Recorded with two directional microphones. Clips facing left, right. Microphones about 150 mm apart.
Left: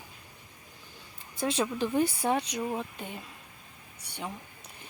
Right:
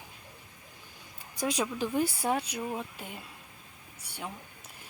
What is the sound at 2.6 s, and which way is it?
Speech, 5° left (ahead or behind).